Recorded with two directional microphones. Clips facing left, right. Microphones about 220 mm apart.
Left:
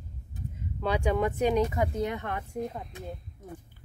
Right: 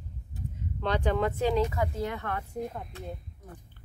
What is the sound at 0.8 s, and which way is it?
Speech, 10° left (ahead or behind).